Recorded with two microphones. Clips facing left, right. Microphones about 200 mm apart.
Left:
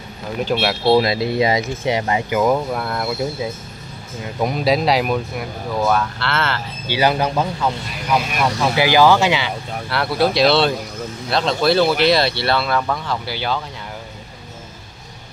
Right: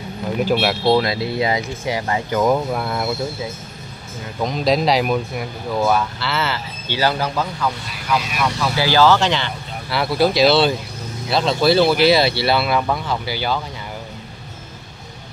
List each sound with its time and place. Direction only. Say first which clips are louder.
0.4 s speech: right 1 dB; 5° right (ahead or behind)
0.8 s speech: left 4 dB; 20° left (ahead or behind)
2.5 s speech: even; 5° right (ahead or behind)
4.4 s speech: even; 5° left (ahead or behind)
6.9 s speech: left 2 dB; 15° left (ahead or behind); by 13.6 s centre (ahead or behind)